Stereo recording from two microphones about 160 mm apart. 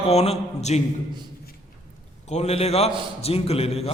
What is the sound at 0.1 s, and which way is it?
Speech, 40° left (ahead or behind).